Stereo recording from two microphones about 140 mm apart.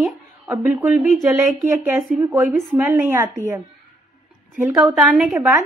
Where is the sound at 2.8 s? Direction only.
15° right (ahead or behind).